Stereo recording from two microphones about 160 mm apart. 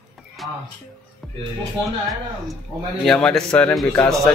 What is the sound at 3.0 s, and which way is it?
A man's voice, centre (ahead or behind).